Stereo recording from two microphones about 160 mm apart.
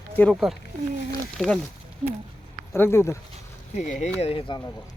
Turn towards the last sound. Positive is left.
turn(degrees=30)  # may be behind; listen again after turning